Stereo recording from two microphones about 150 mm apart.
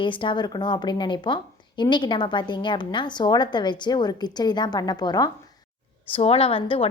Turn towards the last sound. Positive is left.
turn(degrees=40)  # may be behind; listen again after turning